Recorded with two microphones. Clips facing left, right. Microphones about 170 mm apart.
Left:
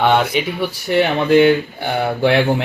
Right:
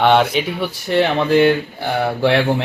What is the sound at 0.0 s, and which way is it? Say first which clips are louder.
Speech: right 1 dB; 5° left (ahead or behind).